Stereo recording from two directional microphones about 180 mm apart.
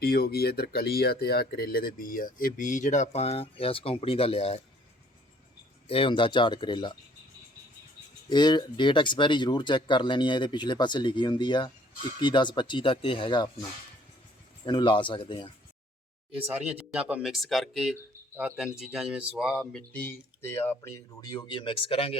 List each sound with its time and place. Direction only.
0.0 s speech: 60° left (ahead or behind); by 4.6 s 35° left (ahead or behind)
5.9 s speech: 30° left (ahead or behind)
8.3 s speech: 25° left (ahead or behind)
16.4 s speech: 10° right (ahead or behind); by 22.2 s 30° left (ahead or behind)